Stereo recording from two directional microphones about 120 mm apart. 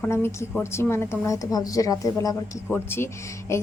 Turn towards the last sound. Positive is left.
turn(degrees=25)  # may be behind; listen again after turning